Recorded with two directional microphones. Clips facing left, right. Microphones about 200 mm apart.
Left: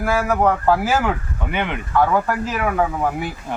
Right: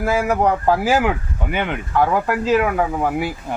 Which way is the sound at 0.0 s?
20° right (ahead or behind).